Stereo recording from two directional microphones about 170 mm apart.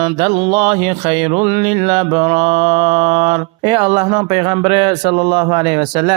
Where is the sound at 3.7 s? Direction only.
25° right (ahead or behind).